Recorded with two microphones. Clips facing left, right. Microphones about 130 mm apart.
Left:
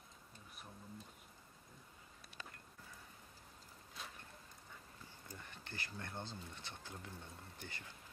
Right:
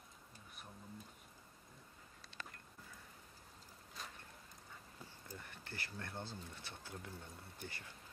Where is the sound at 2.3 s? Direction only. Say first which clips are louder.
Right 2 dB; 25° right (ahead or behind).